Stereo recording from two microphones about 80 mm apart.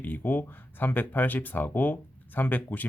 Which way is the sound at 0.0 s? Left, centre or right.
Left.